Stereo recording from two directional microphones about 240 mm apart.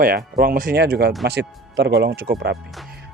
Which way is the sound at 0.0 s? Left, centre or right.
Right.